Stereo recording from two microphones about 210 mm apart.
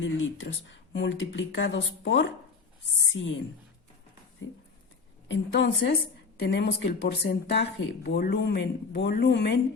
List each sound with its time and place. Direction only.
0.0 s speech: 65° left (ahead or behind)
5.3 s speech: 60° left (ahead or behind)